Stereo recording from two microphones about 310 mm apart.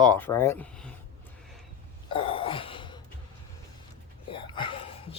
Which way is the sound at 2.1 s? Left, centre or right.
Centre.